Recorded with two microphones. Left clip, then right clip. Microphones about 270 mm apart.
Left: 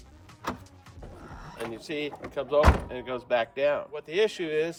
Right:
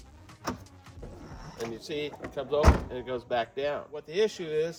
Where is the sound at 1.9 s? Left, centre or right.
Left.